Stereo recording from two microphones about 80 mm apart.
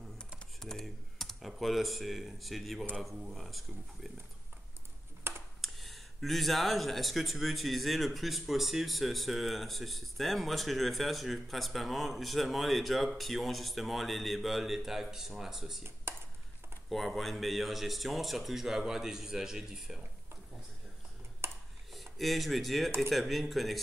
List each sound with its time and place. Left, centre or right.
0.6 s speech: centre
5.2 s computer keyboard: right
5.6 s speech: centre
16.9 s speech: centre
21.9 s speech: centre